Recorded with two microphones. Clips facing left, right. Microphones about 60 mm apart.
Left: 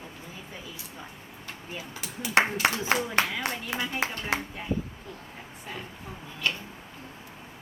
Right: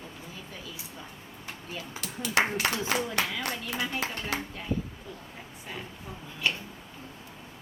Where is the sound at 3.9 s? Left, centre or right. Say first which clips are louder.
Left 3 dB; left.